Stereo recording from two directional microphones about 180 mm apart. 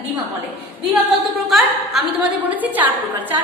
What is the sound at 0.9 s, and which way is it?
A woman's voice, centre (ahead or behind).